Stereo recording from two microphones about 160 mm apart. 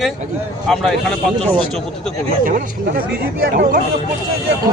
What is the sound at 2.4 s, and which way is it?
Speech, 60° right (ahead or behind).